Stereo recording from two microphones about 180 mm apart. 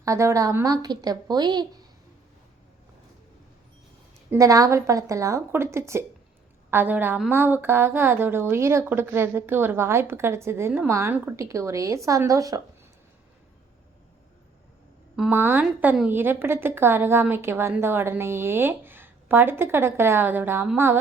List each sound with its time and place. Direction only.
0.0 s a woman's voice: 15° right (ahead or behind)
4.3 s a woman's voice: 20° right (ahead or behind)
15.1 s a woman's voice: 5° right (ahead or behind)